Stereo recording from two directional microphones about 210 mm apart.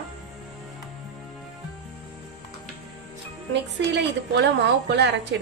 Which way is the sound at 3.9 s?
55° right (ahead or behind).